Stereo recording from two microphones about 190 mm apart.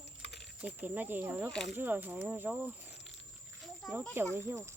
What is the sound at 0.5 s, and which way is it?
Speech, 10° right (ahead or behind).